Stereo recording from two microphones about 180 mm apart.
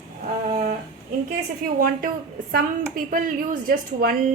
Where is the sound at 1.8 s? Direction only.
50° right (ahead or behind).